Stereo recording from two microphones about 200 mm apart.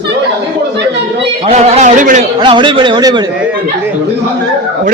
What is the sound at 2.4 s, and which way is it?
Speech, 25° right (ahead or behind).